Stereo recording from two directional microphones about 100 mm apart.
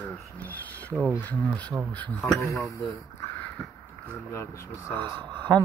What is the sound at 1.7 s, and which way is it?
Speech, 20° right (ahead or behind).